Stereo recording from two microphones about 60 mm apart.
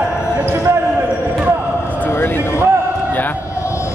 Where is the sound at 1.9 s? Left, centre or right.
Left.